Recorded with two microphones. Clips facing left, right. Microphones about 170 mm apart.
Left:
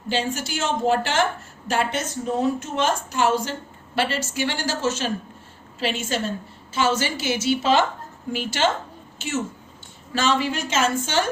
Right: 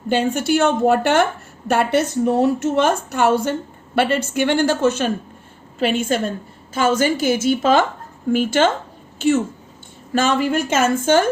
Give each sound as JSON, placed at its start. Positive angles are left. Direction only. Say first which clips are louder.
{"t": 0.1, "sound": "a woman's voice", "louder": "right 8 dB", "side_deg": -55}